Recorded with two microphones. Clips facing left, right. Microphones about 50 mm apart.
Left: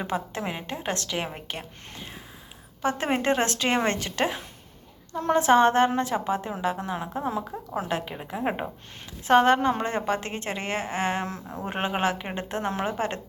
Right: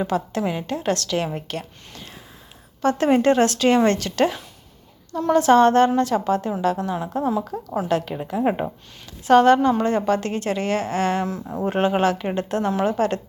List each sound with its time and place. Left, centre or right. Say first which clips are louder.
0.0 s a woman's voice: right 6 dB; left
7.3 s speech: right 6 dB; left
7.8 s a woman's voice: right 7 dB; left
9.2 s a woman's voice: right 5 dB; left